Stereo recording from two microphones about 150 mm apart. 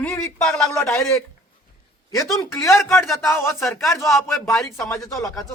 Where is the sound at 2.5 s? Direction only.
20° left (ahead or behind).